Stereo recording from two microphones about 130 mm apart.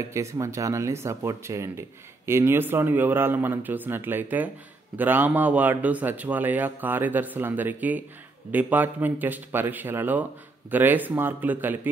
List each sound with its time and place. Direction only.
0.0 s speech: 25° right (ahead or behind)